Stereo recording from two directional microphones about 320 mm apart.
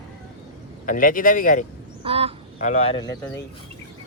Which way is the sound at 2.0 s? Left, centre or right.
Centre.